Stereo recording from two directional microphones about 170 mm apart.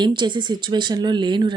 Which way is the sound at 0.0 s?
25° right (ahead or behind).